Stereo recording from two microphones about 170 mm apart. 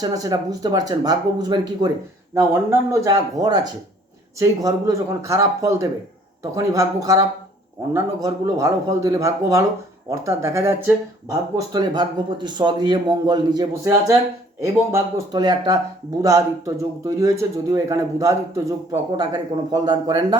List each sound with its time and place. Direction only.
0.0 s speech: 20° right (ahead or behind)